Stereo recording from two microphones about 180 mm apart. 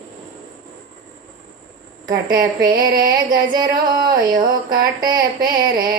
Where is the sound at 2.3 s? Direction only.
20° right (ahead or behind).